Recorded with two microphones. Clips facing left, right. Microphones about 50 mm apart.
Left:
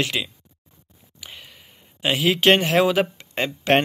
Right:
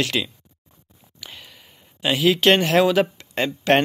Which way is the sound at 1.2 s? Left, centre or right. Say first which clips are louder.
Right 1 dB; left.